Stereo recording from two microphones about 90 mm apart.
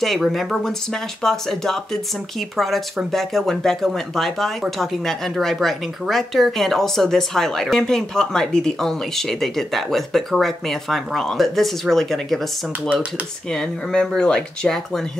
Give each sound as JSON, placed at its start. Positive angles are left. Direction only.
{"t": 0.0, "sound": "speech", "side_deg": 0}
{"t": 13.5, "sound": "speech", "side_deg": 10}